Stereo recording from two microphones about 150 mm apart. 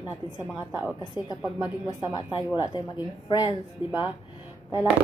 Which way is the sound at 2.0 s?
30° left (ahead or behind).